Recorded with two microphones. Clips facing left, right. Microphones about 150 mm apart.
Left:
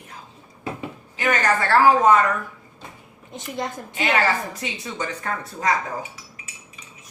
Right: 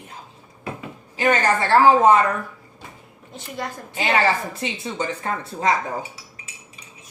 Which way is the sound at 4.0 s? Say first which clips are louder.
Right 1 dB; 30° right (ahead or behind).